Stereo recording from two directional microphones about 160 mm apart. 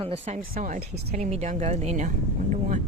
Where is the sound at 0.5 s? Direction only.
55° right (ahead or behind).